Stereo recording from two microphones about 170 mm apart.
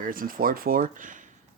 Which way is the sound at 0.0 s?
55° right (ahead or behind).